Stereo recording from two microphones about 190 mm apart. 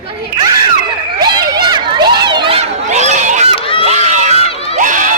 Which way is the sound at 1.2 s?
20° right (ahead or behind).